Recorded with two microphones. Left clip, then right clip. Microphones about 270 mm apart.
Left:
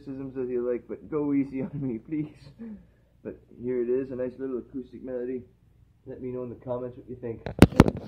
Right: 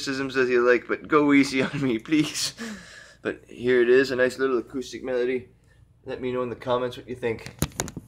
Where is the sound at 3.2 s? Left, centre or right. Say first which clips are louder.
Right 9 dB; centre.